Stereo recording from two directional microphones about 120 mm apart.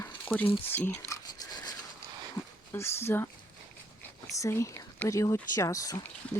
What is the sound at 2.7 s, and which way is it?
Speech, 20° left (ahead or behind).